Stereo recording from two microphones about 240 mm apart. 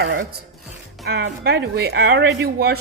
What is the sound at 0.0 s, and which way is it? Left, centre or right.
Speech, right.